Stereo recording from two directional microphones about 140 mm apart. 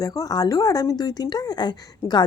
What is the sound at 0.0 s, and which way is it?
Speech, 25° left (ahead or behind).